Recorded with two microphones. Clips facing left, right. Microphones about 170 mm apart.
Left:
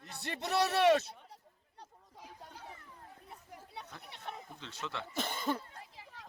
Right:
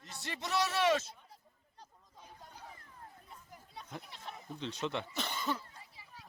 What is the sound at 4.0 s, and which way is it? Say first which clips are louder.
Speech: left 3 dB; 65° left (ahead or behind).